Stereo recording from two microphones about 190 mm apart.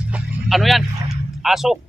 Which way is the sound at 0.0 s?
5° right (ahead or behind).